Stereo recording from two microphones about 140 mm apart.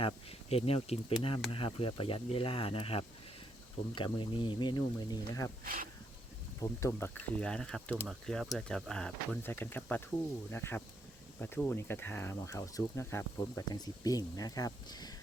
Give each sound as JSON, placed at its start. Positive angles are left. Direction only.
{"t": 0.0, "sound": "speech", "side_deg": 45}
{"t": 5.6, "sound": "speech", "side_deg": -85}
{"t": 6.6, "sound": "speech", "side_deg": 20}